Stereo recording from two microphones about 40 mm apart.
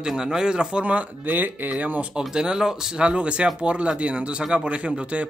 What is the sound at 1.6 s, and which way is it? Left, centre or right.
Speech, right.